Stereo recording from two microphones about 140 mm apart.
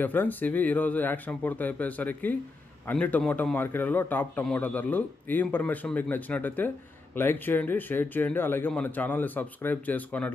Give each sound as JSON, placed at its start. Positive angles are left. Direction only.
{"t": 0.0, "sound": "a man's voice", "side_deg": 10}